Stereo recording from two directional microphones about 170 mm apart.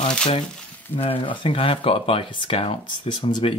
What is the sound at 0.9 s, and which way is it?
Speech, 30° left (ahead or behind).